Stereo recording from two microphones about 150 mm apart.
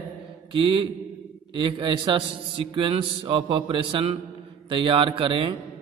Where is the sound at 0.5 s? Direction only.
35° right (ahead or behind).